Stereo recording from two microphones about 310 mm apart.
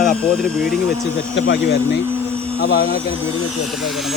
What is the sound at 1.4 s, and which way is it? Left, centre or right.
Speech, left.